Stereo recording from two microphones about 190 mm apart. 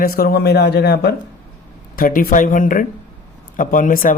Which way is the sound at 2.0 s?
50° left (ahead or behind).